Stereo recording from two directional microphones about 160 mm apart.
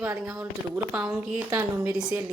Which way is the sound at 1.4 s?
20° right (ahead or behind).